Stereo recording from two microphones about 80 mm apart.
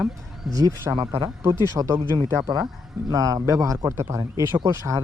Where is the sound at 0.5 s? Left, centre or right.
Right.